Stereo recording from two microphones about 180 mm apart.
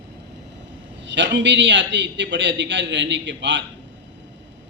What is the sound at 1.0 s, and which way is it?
A man's voice, 80° right.